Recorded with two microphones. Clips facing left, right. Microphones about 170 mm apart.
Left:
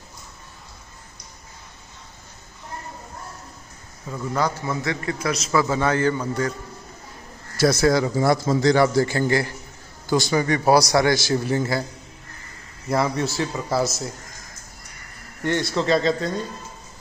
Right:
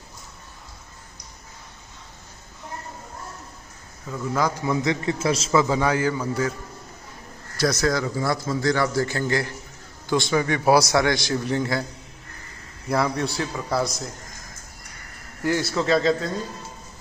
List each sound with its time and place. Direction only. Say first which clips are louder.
4.1 s a man's voice: right 1 dB; 5° left (ahead or behind)
4.4 s a man's voice: right 1 dB; 10° right (ahead or behind)
7.5 s a man's voice: left 4 dB; 5° left (ahead or behind)
12.8 s a man's voice: left 1 dB; centre (ahead or behind)
15.4 s a man's voice: left 1 dB; 5° right (ahead or behind)